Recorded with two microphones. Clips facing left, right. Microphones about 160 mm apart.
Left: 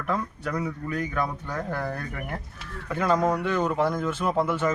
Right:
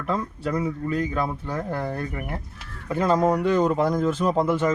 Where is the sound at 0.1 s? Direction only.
25° right (ahead or behind).